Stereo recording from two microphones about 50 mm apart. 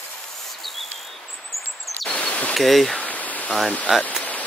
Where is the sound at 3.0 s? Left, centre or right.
Left.